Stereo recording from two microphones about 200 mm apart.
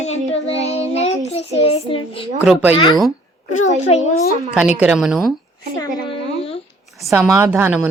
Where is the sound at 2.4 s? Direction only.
5° right (ahead or behind).